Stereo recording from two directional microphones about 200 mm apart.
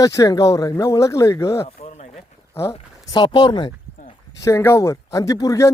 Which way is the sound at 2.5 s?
15° left (ahead or behind).